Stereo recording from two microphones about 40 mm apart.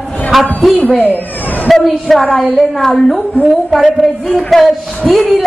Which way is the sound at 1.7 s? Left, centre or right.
Centre.